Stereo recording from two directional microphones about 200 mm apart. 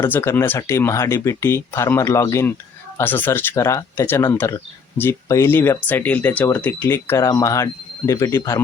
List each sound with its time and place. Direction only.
0.0 s speech: 10° left (ahead or behind)